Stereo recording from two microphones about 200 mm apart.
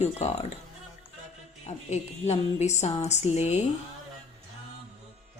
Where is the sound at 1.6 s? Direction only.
35° left (ahead or behind).